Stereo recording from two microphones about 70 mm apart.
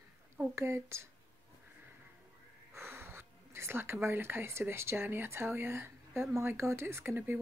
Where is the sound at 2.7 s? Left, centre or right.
Right.